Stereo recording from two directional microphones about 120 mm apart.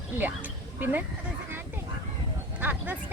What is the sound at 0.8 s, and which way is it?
Speech, 15° right (ahead or behind).